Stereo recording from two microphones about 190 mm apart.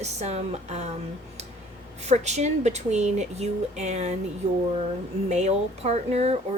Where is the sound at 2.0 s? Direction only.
35° right (ahead or behind).